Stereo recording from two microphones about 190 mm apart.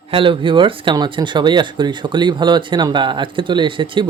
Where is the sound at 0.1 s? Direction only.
25° right (ahead or behind).